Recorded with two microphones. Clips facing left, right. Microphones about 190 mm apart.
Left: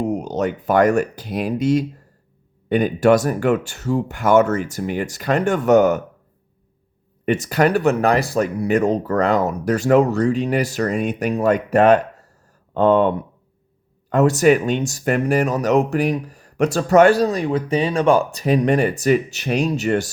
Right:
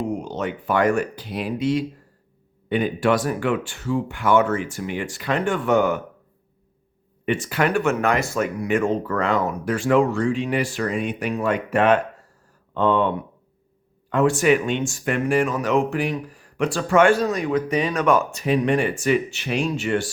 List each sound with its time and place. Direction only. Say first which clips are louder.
0.1 s speech: left 5 dB; 40° left (ahead or behind)
7.3 s speech: left 4 dB; 40° left (ahead or behind)